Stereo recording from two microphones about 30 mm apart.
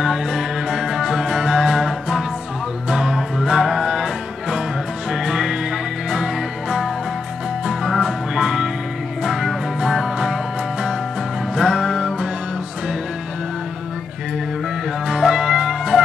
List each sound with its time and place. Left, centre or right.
0.0 s music: centre
2.9 s music: centre
8.0 s music: centre
15.0 s music: centre